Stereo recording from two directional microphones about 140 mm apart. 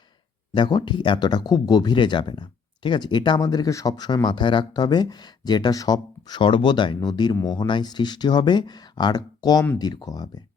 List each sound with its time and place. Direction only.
0.5 s speech: 30° left (ahead or behind)